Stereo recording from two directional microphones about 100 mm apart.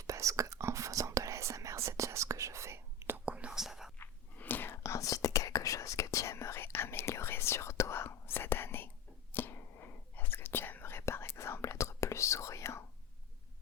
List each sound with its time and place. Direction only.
0.0 s whispering: 30° right (ahead or behind)
3.2 s whispering: 10° right (ahead or behind)
3.9 s whispering: 20° left (ahead or behind)